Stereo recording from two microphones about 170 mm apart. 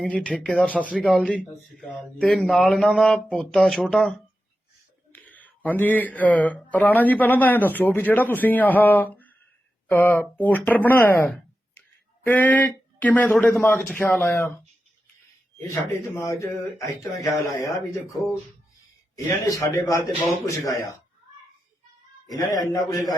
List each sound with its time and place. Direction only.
0.0 s speech: 5° left (ahead or behind)
0.9 s speech: 5° right (ahead or behind)
5.1 s speech: 10° left (ahead or behind)
15.5 s speech: 15° left (ahead or behind)
19.1 s speech: 20° left (ahead or behind)
22.7 s speech: 20° left (ahead or behind)